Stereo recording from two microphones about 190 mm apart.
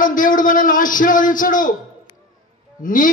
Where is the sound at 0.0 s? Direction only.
45° left (ahead or behind).